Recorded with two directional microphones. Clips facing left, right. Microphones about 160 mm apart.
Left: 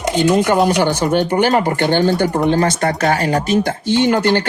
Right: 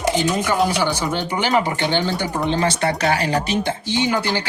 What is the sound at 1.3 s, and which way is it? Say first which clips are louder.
Speech: left 5 dB; 45° left (ahead or behind).